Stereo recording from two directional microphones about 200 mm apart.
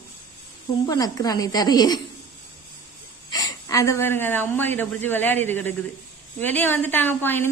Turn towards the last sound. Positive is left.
turn(degrees=10)  # may be behind; listen again after turning